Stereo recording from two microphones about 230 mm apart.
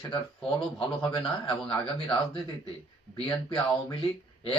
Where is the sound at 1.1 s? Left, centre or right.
Left.